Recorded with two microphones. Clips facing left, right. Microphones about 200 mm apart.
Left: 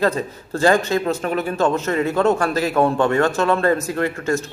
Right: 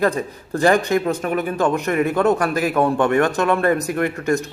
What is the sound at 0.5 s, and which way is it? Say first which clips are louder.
A man's voice: right 1 dB; 15° right (ahead or behind).